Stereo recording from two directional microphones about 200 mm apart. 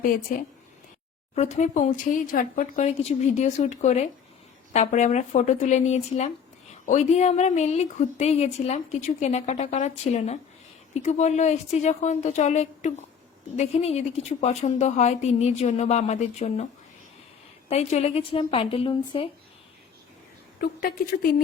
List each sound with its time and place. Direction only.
0.0 s a woman's voice: 45° left (ahead or behind)
17.7 s a woman's voice: 35° left (ahead or behind)
20.6 s a woman's voice: 50° left (ahead or behind)